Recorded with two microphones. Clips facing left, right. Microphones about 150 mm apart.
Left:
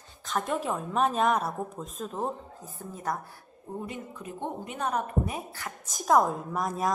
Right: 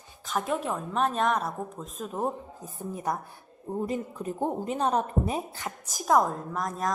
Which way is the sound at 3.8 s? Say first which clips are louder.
Right 10 dB; 35° right (ahead or behind).